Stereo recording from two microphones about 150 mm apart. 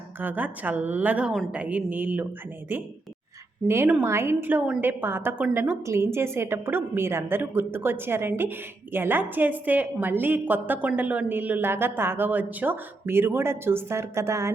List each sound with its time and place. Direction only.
0.2 s a woman's voice: 10° right (ahead or behind)
3.7 s a woman's voice: 15° right (ahead or behind)